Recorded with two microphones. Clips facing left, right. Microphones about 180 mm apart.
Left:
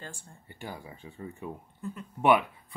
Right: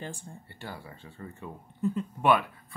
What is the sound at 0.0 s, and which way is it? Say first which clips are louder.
Speech: right 5 dB; 15° right (ahead or behind).